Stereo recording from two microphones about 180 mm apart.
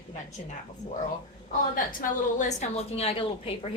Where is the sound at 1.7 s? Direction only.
50° left (ahead or behind); by 3.7 s 30° left (ahead or behind).